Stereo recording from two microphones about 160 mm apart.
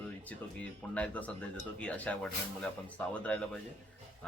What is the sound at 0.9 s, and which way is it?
A man's voice, 10° left (ahead or behind).